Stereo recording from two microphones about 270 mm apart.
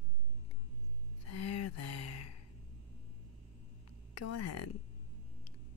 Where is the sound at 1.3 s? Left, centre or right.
Left.